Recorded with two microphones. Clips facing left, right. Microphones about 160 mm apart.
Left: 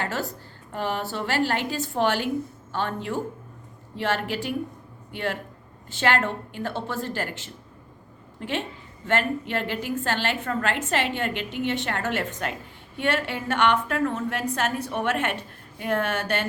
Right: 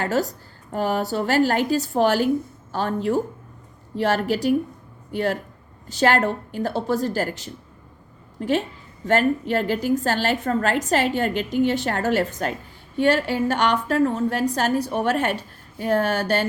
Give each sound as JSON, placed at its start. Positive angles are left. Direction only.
{"t": 0.0, "sound": "a woman's voice", "side_deg": -40}